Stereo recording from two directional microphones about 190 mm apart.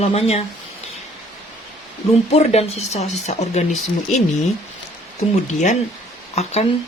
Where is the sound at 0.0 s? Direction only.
35° left (ahead or behind).